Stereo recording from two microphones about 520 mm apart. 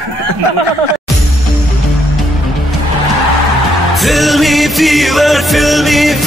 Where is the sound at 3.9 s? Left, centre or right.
Centre.